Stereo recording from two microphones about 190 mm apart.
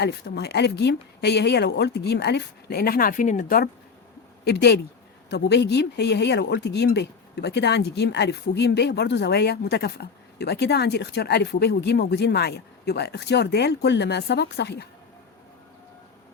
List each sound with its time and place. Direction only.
0.0 s speech: 60° left (ahead or behind)
4.4 s speech: 60° left (ahead or behind)